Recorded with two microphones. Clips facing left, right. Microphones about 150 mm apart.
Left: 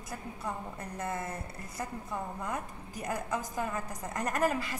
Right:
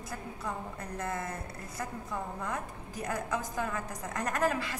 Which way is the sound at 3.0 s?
20° left (ahead or behind).